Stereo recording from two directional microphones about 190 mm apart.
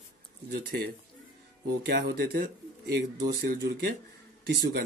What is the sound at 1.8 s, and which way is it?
Speech, 55° right (ahead or behind).